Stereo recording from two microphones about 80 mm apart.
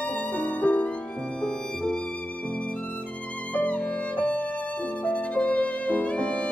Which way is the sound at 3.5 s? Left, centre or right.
Centre.